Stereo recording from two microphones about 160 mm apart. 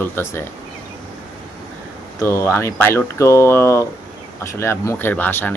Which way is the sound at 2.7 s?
10° left (ahead or behind).